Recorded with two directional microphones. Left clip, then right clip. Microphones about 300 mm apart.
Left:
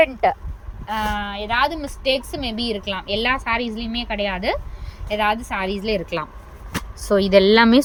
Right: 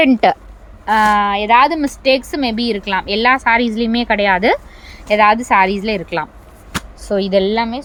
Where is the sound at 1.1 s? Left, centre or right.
Centre.